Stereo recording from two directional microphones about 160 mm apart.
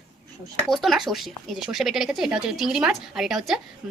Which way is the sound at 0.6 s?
Centre (ahead or behind).